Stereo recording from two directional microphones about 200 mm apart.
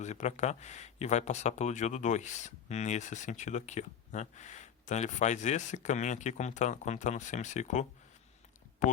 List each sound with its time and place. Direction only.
0.0 s speech: 35° left (ahead or behind)